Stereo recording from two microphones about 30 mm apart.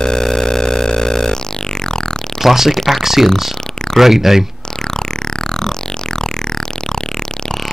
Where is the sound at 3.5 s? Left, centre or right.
Left.